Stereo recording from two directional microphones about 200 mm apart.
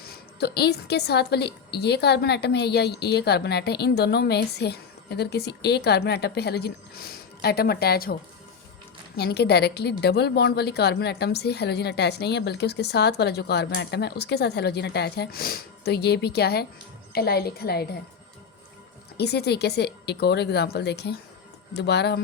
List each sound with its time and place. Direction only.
0.0 s a woman's voice: 50° left (ahead or behind)
19.1 s a woman's voice: 55° left (ahead or behind)